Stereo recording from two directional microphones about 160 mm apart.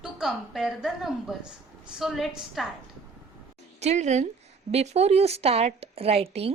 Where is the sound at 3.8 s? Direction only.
45° right (ahead or behind).